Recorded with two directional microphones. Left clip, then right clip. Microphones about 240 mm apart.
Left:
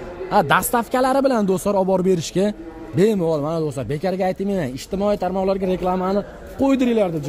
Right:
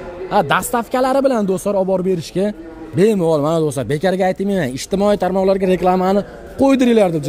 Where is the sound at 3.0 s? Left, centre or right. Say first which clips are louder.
Right 4 dB; centre.